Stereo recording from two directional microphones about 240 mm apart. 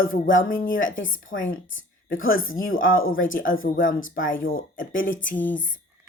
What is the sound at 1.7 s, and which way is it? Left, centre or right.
Speech, left.